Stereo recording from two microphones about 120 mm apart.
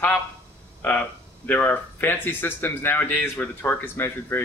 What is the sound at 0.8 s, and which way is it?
Speech, 15° left (ahead or behind).